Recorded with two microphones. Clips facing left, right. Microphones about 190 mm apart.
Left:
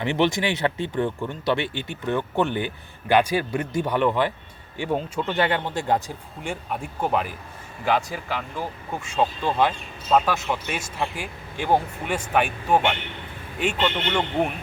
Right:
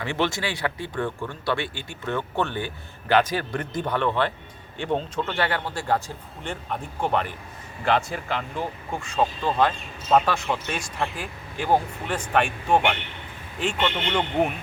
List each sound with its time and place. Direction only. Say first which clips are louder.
0.0 s a man's voice: left 4 dB; 20° left (ahead or behind); by 14.5 s 5° right (ahead or behind)